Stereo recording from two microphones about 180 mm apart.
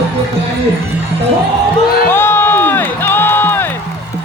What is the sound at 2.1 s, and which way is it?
Music, 10° left (ahead or behind).